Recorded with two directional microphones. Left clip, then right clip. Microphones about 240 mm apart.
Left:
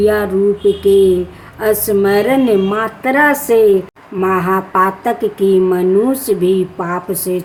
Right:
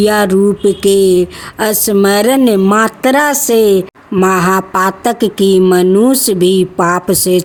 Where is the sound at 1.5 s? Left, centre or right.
Right.